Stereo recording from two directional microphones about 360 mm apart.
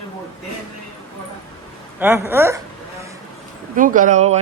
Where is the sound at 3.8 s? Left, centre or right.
Right.